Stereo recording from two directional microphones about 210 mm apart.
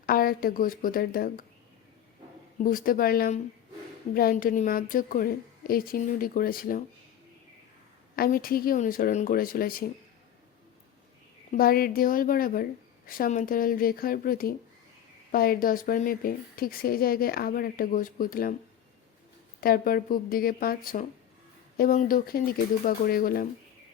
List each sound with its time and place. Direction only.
0.0 s speech: 45° left (ahead or behind)
2.6 s speech: 45° left (ahead or behind)
8.1 s speech: 45° left (ahead or behind)
11.5 s speech: 45° left (ahead or behind)
19.6 s speech: 45° left (ahead or behind)